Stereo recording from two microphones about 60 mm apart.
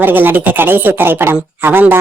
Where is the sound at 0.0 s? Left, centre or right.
Right.